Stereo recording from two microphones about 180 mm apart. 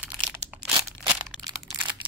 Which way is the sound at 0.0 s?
5° right (ahead or behind).